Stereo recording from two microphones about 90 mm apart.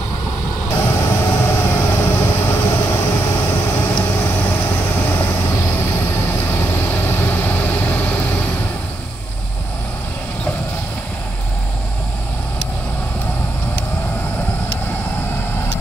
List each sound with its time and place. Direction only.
0.7 s vehicle: 30° left (ahead or behind)
6.5 s vehicle: 25° left (ahead or behind)